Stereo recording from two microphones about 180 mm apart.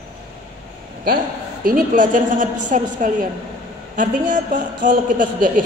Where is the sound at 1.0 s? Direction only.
55° right (ahead or behind).